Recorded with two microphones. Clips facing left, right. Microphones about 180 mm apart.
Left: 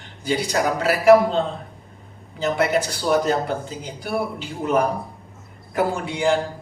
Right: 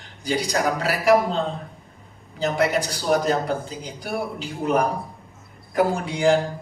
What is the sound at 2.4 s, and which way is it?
A man's voice, 40° right (ahead or behind).